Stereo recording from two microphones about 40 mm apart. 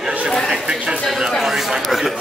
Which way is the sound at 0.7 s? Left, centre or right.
Right.